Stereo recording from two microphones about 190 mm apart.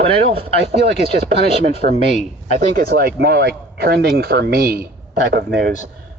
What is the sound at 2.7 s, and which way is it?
Speech, 50° right (ahead or behind).